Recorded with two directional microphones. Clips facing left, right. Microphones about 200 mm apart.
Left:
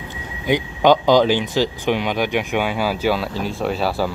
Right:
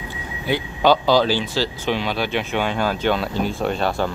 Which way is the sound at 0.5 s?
15° left (ahead or behind).